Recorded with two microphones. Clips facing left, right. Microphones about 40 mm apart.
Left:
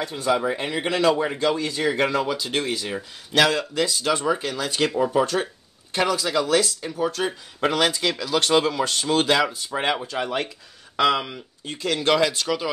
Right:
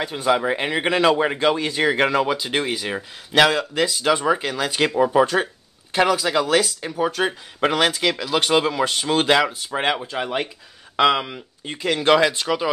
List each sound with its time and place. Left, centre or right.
0.0 s speech: right
0.5 s speech: right